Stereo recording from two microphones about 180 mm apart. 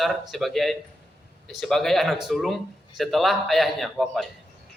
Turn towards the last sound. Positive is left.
turn(degrees=0)  # may be behind; listen again after turning